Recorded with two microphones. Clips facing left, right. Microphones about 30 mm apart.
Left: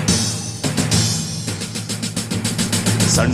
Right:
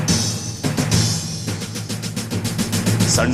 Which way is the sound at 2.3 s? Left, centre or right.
Left.